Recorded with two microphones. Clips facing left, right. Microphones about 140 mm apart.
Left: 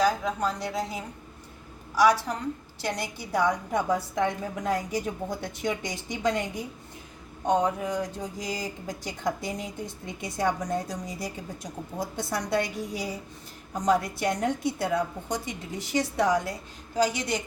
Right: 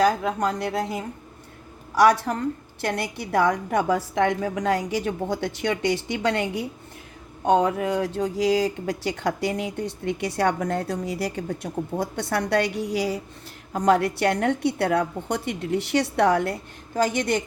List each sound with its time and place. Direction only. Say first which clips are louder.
0.0 s a woman's voice: right 4 dB; 60° right (ahead or behind)